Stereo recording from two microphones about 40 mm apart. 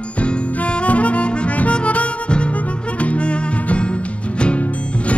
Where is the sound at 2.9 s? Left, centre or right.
Left.